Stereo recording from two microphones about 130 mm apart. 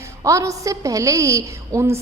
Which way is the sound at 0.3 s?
25° right (ahead or behind).